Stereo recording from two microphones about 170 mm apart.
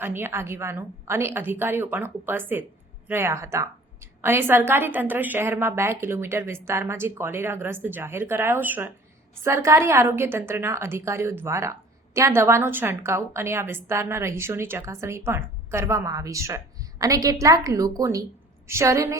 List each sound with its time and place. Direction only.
0.0 s a woman's voice: 15° right (ahead or behind)